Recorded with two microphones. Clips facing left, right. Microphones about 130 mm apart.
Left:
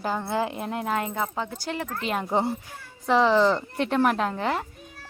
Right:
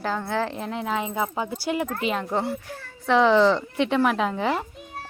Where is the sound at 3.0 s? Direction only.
Centre (ahead or behind).